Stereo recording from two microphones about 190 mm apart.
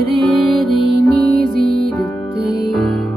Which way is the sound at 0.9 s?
55° right (ahead or behind).